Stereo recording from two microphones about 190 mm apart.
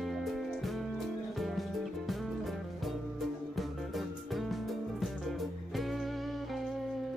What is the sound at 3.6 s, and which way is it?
Music, centre (ahead or behind).